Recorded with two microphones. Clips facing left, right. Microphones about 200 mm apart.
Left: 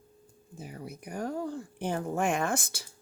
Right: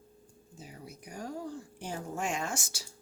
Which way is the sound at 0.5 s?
55° left (ahead or behind).